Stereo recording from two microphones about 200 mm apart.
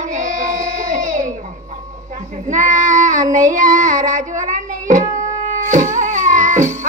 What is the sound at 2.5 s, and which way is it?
Child singing, 40° right (ahead or behind).